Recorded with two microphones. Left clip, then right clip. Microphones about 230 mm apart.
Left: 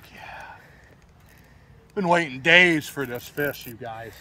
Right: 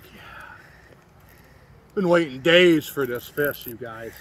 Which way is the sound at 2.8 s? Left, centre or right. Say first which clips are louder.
Right 4 dB; left.